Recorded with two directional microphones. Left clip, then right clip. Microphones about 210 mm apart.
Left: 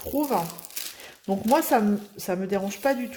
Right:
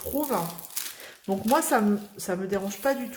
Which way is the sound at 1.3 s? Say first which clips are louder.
Left 2 dB; 20° left (ahead or behind).